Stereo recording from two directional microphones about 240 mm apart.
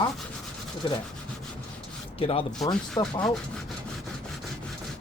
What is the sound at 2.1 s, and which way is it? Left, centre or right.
Speech, left.